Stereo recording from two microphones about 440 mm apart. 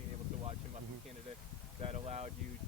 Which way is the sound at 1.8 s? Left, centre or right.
Centre.